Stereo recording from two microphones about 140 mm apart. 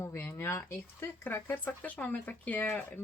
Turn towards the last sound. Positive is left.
turn(degrees=10)  # may be behind; listen again after turning